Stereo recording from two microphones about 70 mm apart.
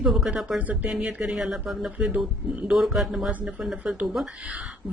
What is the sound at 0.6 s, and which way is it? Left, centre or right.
Speech, right.